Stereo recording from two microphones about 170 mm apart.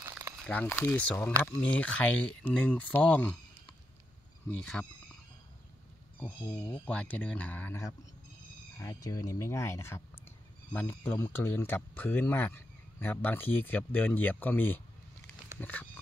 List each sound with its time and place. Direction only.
0.0 s a sound: 15° right (ahead or behind)
0.5 s speech: 10° left (ahead or behind)
4.8 s speech: 10° left (ahead or behind)
6.1 s speech: 10° left (ahead or behind)